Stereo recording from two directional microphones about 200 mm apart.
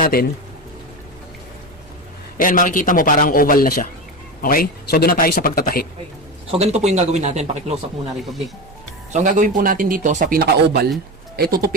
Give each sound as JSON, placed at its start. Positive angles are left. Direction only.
{"t": 0.0, "sound": "speech", "side_deg": 50}
{"t": 2.4, "sound": "a man's voice", "side_deg": 40}
{"t": 6.5, "sound": "speech", "side_deg": -30}
{"t": 9.1, "sound": "speech", "side_deg": -40}